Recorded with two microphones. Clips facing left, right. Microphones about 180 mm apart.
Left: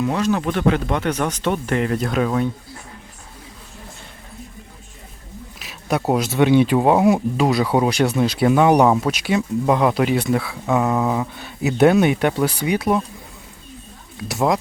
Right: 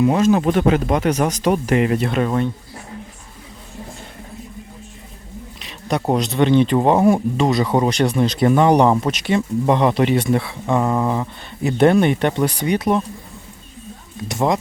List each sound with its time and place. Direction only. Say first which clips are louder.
0.0 s speech: right 5 dB; 20° right (ahead or behind); by 2.5 s centre (ahead or behind)
5.5 s speech: even; 5° left (ahead or behind)
14.2 s speech: even; centre (ahead or behind)